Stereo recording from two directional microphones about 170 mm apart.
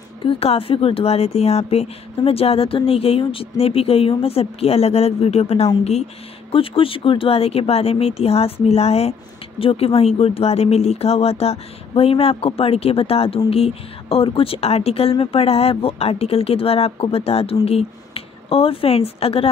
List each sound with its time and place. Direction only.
0.2 s speech: 35° left (ahead or behind)